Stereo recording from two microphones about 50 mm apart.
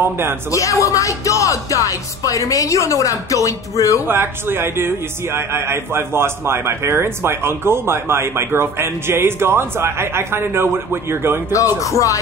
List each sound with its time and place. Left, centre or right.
0.0 s speech: right
0.5 s music: left
4.1 s a man's voice: right
11.5 s music: left